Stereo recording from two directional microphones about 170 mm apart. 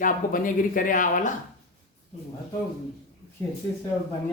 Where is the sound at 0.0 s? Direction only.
55° left (ahead or behind).